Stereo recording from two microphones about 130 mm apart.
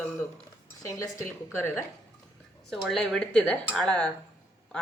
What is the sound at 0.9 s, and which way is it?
Speech, 25° left (ahead or behind).